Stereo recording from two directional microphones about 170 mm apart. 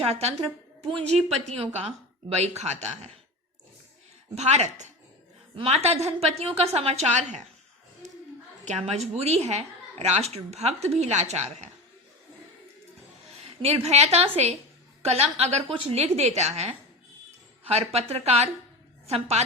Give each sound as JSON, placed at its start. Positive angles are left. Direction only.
{"t": 0.1, "sound": "a woman's voice", "side_deg": -40}
{"t": 4.4, "sound": "a woman's voice", "side_deg": -40}
{"t": 8.6, "sound": "a woman's voice", "side_deg": -40}
{"t": 13.4, "sound": "a woman's voice", "side_deg": -35}